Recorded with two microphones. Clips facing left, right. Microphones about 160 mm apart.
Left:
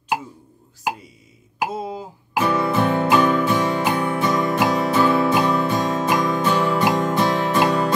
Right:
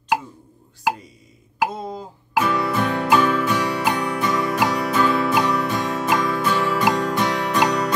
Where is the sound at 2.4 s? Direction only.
20° left (ahead or behind).